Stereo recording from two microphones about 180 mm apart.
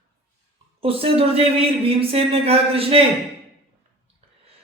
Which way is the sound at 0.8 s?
30° right (ahead or behind).